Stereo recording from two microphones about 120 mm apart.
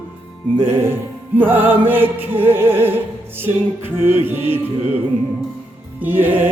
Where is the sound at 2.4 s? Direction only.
20° right (ahead or behind).